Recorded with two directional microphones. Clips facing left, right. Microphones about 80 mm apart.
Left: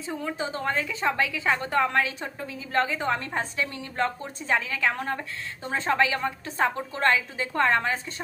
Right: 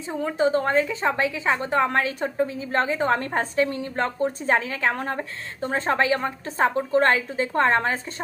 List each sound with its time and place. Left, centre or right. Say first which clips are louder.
0.2 s a woman's voice: right 12 dB; right
3.1 s a woman's voice: right 4 dB; right